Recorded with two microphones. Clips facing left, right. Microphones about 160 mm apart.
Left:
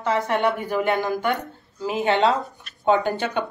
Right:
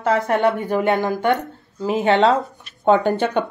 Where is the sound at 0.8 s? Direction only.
25° right (ahead or behind).